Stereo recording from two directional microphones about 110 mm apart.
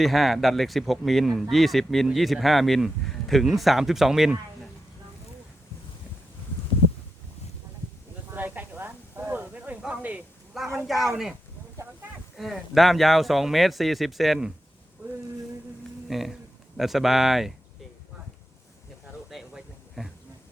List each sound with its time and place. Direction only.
0.0 s speech: centre (ahead or behind)
8.3 s a sound: 15° right (ahead or behind)
10.5 s speech: centre (ahead or behind)
12.4 s speech: centre (ahead or behind)
16.0 s speech: centre (ahead or behind)
19.3 s a sound: centre (ahead or behind)